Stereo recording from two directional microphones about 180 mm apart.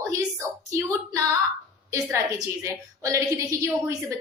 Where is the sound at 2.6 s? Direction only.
15° right (ahead or behind).